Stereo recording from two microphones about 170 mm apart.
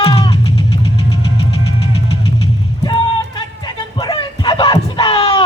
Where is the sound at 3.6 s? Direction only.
30° left (ahead or behind).